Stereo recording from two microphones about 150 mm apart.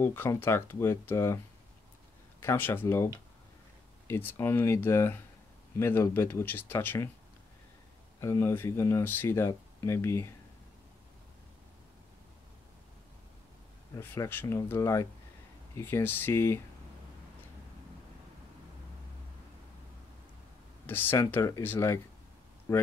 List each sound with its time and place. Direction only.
0.0 s speech: 15° left (ahead or behind)
2.4 s speech: 15° left (ahead or behind)
4.1 s speech: 15° left (ahead or behind)
8.2 s speech: 20° left (ahead or behind)
13.9 s speech: 20° left (ahead or behind)
20.8 s speech: 15° left (ahead or behind)